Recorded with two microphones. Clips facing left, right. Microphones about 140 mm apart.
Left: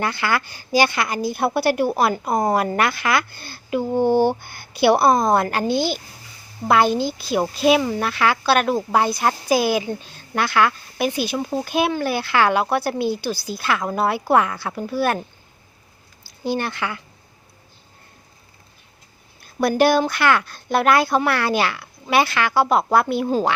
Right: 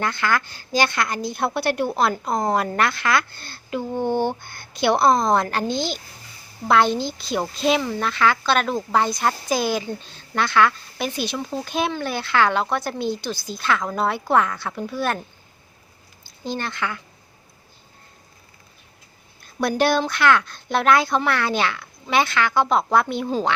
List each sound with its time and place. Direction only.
0.0 s a woman's voice: 10° left (ahead or behind)
16.4 s a woman's voice: 10° left (ahead or behind)
19.5 s a woman's voice: 5° left (ahead or behind)